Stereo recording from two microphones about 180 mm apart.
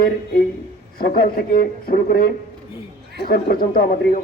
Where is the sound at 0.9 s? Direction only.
55° left (ahead or behind).